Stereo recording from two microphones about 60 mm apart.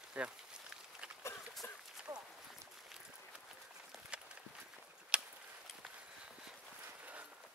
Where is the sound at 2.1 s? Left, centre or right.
Right.